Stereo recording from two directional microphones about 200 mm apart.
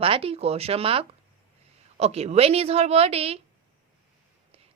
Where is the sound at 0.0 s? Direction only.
30° right (ahead or behind).